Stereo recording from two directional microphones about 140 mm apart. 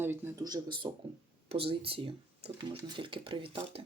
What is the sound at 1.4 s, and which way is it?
Speech, 40° right (ahead or behind).